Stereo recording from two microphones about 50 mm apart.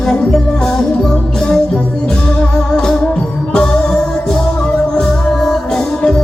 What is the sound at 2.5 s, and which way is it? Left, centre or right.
Music, centre.